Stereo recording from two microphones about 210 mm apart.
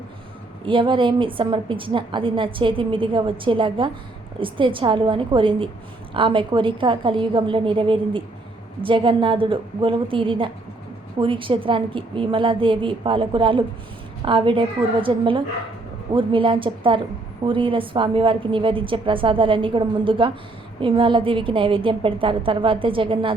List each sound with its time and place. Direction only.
0.6 s a woman's voice: 25° right (ahead or behind)